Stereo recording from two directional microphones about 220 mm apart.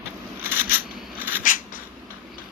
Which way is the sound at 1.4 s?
40° left (ahead or behind).